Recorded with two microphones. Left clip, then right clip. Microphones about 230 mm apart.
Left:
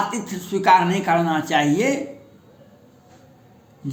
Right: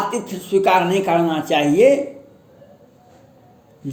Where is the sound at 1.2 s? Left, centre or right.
Centre.